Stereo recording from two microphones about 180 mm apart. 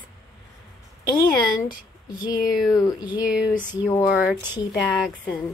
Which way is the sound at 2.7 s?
20° left (ahead or behind).